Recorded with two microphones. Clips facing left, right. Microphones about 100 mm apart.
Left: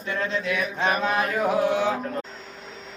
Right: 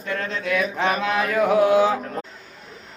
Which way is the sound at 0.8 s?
90° right.